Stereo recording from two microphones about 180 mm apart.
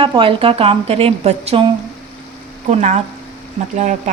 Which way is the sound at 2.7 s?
40° right (ahead or behind).